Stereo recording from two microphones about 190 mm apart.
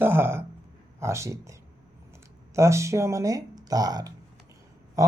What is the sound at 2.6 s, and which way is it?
A man's voice, 15° right (ahead or behind).